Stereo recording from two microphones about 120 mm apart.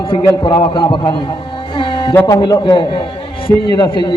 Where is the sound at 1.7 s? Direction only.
40° left (ahead or behind).